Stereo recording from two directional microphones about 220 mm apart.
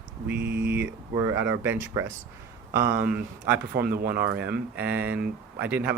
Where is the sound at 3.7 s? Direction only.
45° right (ahead or behind).